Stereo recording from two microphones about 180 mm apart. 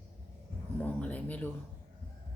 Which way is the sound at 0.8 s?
10° left (ahead or behind).